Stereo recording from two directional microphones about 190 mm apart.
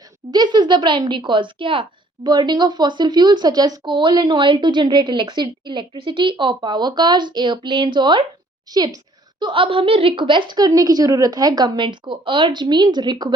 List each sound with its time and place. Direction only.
0.3 s speech: 20° right (ahead or behind)